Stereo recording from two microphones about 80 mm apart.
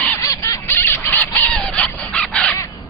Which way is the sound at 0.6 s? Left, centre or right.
Left.